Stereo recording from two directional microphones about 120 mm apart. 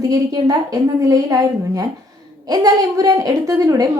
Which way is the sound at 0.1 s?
30° right (ahead or behind).